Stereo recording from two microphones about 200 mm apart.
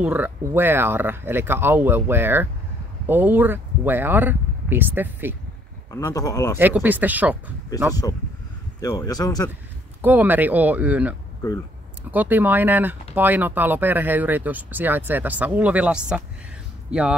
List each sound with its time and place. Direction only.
0.0 s speech: 10° right (ahead or behind)
5.9 s speech: 15° left (ahead or behind)
6.6 s speech: 10° right (ahead or behind)
8.8 s speech: 20° left (ahead or behind)
10.0 s speech: 10° right (ahead or behind)